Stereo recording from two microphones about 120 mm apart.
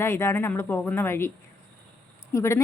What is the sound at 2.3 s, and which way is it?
Speech, 25° left (ahead or behind).